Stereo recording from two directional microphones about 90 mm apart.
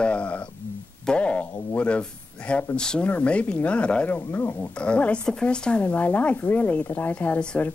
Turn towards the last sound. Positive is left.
turn(degrees=15)  # may be behind; listen again after turning